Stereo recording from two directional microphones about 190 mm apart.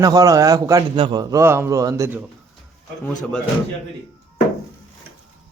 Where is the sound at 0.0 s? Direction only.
20° right (ahead or behind).